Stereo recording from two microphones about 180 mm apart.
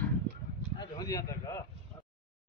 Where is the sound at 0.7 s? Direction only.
20° left (ahead or behind).